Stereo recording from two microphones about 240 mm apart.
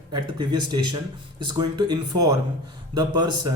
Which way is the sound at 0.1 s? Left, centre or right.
Centre.